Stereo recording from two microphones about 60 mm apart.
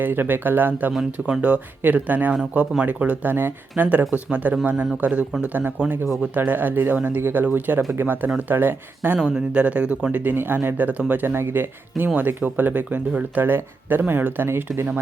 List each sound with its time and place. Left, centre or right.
0.0 s speech: right
9.1 s speech: centre
9.6 s speech: right